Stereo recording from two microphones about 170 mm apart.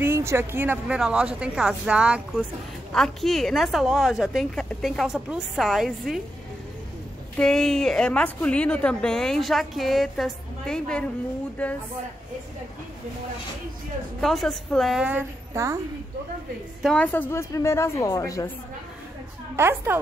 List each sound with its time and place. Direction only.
0.0 s a woman's voice: 15° right (ahead or behind)
7.3 s a woman's voice: 5° left (ahead or behind)
14.2 s a woman's voice: centre (ahead or behind); by 15.8 s 15° right (ahead or behind)
16.8 s a woman's voice: 5° left (ahead or behind)
19.5 s a woman's voice: 15° right (ahead or behind)